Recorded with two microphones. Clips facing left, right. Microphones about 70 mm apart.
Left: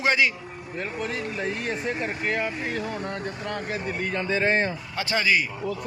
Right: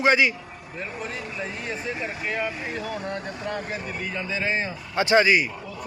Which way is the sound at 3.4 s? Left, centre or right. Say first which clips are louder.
Left 1 dB; left.